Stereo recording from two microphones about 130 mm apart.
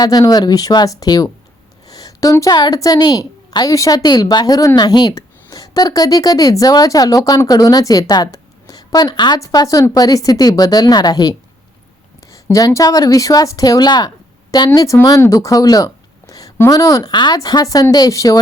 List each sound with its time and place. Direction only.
0.0 s a woman's voice: 30° left (ahead or behind)